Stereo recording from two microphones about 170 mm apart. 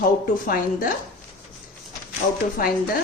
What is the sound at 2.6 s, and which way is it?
Speech, 55° left (ahead or behind).